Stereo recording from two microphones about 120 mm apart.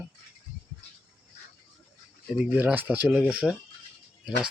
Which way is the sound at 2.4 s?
15° right (ahead or behind).